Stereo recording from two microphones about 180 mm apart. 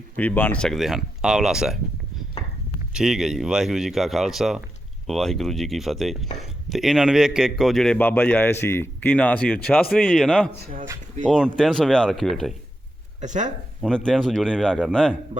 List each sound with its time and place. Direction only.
0.2 s speech: 10° left (ahead or behind)
2.9 s a man's voice: 5° right (ahead or behind)
13.2 s speech: 40° right (ahead or behind)
13.8 s speech: 5° left (ahead or behind)